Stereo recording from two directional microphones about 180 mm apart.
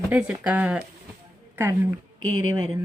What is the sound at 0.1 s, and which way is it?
Speech, 10° right (ahead or behind).